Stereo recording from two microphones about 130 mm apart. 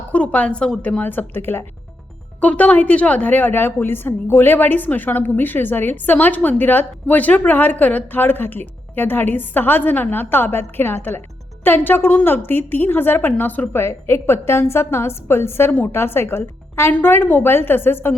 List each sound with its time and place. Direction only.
0.1 s a woman's voice: 10° left (ahead or behind)